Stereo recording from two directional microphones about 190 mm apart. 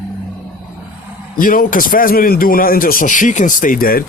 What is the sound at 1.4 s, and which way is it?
Speech, 45° left (ahead or behind).